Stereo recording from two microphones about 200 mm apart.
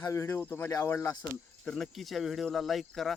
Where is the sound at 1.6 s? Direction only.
Centre (ahead or behind).